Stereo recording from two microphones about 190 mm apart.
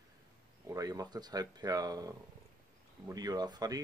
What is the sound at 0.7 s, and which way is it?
Speech, 20° right (ahead or behind).